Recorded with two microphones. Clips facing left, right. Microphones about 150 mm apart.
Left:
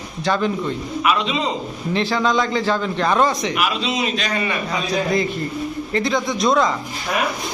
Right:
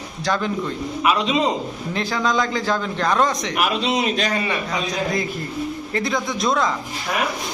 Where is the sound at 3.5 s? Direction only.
55° right (ahead or behind).